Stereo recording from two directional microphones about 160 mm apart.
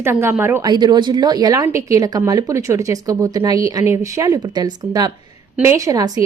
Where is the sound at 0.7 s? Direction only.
25° right (ahead or behind).